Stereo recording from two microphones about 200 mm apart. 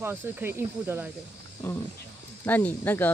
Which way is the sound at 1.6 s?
10° left (ahead or behind).